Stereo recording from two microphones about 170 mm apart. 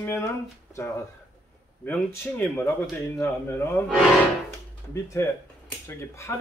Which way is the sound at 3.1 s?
15° left (ahead or behind).